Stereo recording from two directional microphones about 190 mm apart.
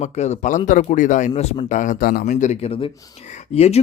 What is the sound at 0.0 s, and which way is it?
Speech, 35° left (ahead or behind).